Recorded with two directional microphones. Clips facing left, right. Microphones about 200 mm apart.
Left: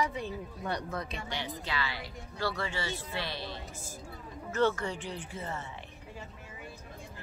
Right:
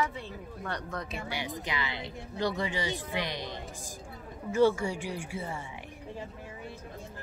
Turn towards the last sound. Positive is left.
turn(degrees=-10)  # may be behind; listen again after turning